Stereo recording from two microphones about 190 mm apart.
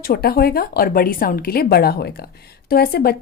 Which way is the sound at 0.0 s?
55° left (ahead or behind).